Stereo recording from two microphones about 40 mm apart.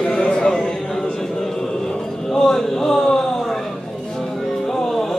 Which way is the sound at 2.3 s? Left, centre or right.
Centre.